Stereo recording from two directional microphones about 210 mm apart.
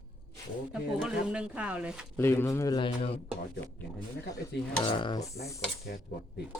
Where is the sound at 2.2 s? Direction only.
10° left (ahead or behind); by 3.2 s 30° left (ahead or behind).